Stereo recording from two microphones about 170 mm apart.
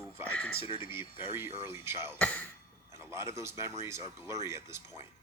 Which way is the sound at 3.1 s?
15° right (ahead or behind).